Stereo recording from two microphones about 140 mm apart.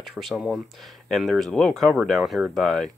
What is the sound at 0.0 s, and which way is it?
Speech, centre (ahead or behind).